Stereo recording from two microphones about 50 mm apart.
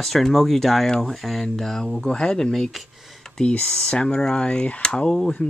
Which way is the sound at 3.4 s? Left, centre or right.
Centre.